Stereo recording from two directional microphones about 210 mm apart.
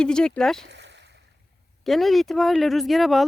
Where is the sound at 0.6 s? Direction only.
55° right (ahead or behind).